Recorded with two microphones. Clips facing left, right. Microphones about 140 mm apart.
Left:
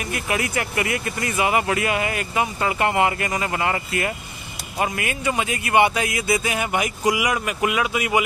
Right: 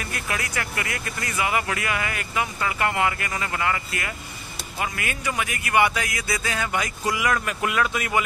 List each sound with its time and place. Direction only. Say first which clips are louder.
0.0 s speech: left 5 dB; 20° left (ahead or behind)